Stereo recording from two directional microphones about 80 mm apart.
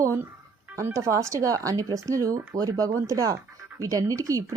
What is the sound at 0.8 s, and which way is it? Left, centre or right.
Speech, right.